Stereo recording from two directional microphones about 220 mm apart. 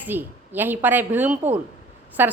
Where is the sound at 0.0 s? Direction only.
10° right (ahead or behind).